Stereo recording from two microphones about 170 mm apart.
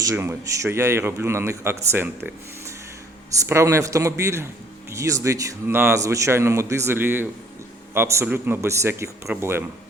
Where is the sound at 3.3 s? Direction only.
15° right (ahead or behind).